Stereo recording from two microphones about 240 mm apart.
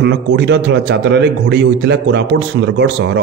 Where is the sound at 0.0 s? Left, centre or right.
Right.